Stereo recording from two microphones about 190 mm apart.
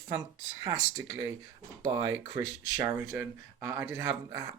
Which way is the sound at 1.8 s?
20° right (ahead or behind).